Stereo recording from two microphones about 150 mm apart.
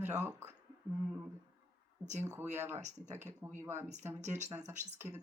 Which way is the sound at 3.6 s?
15° right (ahead or behind).